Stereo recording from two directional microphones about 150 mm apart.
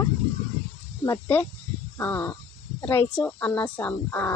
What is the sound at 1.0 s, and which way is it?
Speech, 15° left (ahead or behind).